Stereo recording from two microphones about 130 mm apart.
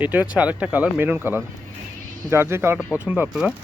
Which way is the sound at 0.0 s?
10° right (ahead or behind).